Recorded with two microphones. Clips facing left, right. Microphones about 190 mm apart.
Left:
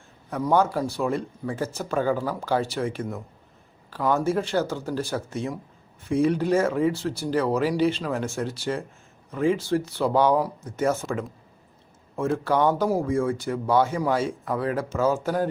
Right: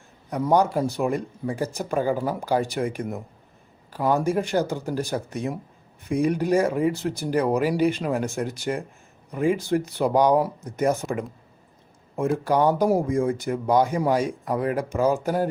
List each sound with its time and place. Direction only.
0.4 s speech: 15° right (ahead or behind)